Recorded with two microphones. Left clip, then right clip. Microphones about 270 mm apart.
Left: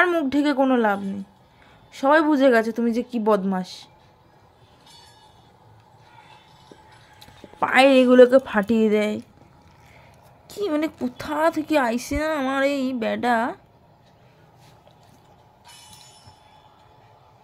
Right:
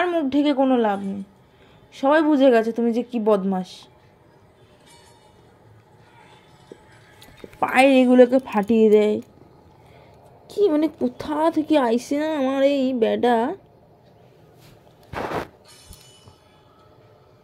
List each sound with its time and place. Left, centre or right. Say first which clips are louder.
0.0 s a woman's voice: left 1 dB; left
7.2 s a woman's voice: right 1 dB; centre
10.5 s a woman's voice: right 5 dB; centre